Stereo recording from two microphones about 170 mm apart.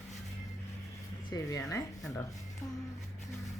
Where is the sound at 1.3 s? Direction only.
20° left (ahead or behind).